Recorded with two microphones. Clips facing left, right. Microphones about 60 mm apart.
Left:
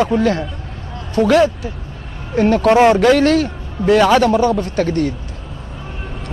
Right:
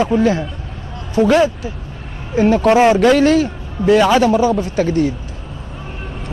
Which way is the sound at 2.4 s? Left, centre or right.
Left.